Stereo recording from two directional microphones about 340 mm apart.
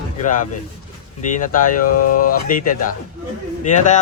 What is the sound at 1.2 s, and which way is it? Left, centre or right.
A man's voice, left.